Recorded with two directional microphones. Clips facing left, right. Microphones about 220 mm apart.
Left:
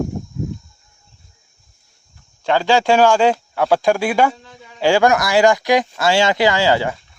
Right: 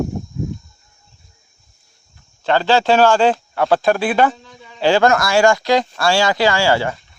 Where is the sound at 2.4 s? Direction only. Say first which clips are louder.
Even; 10° left (ahead or behind).